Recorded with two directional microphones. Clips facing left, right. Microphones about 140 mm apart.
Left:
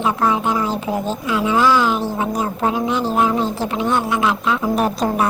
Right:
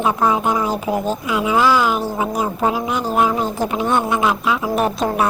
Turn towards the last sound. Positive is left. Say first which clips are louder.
# even
turn(degrees=0)  # may be behind; listen again after turning